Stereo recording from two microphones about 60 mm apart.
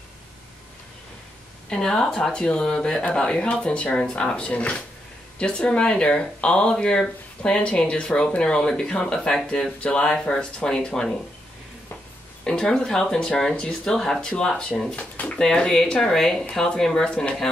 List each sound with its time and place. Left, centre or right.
1.7 s speech: centre
12.4 s speech: centre
15.0 s speech: left
15.3 s speech: centre